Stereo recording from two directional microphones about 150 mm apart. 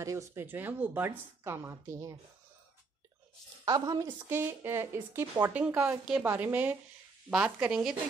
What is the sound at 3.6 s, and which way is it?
Speech, 25° right (ahead or behind).